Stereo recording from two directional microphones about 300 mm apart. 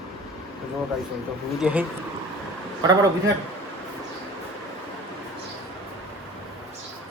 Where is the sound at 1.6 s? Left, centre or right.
Centre.